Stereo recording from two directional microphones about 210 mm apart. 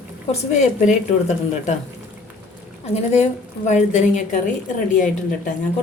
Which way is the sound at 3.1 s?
30° left (ahead or behind).